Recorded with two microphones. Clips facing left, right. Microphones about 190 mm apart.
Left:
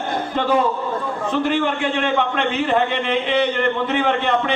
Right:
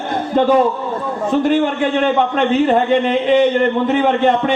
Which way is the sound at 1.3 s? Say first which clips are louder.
Right 5 dB; 40° right (ahead or behind).